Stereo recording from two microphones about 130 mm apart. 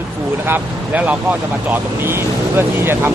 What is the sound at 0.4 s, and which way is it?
Speech, 15° right (ahead or behind).